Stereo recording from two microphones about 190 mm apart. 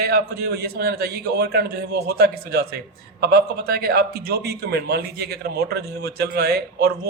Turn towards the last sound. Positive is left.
turn(degrees=-55)  # may be behind; listen again after turning